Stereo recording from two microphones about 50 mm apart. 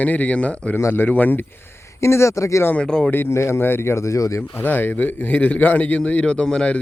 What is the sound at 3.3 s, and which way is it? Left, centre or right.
Speech, left.